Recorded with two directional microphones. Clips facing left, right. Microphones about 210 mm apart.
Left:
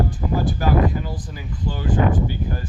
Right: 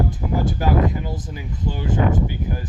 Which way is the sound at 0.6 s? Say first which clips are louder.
Left 1 dB; 25° right (ahead or behind).